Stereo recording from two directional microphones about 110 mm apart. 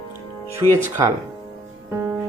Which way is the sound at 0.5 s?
25° right (ahead or behind).